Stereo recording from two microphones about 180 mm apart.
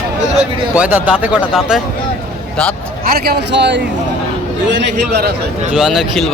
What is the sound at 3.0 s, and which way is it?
Speech, 55° right (ahead or behind).